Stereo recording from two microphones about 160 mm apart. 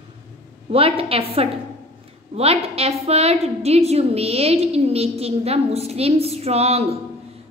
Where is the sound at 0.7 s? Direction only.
35° right (ahead or behind).